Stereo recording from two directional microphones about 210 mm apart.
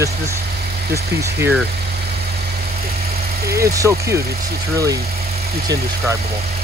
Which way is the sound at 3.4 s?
15° right (ahead or behind).